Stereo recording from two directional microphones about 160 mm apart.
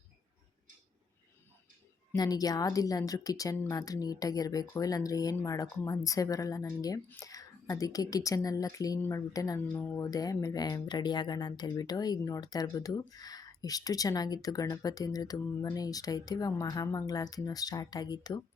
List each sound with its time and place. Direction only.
2.1 s speech: 25° left (ahead or behind)